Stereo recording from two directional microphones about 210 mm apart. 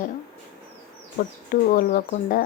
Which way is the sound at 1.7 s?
45° left (ahead or behind).